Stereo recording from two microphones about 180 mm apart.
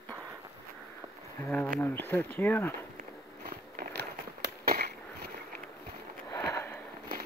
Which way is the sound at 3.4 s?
60° right (ahead or behind).